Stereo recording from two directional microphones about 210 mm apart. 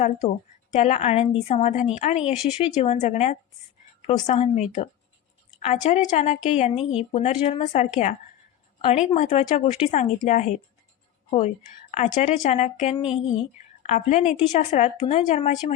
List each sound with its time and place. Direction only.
0.7 s a woman's voice: 30° left (ahead or behind)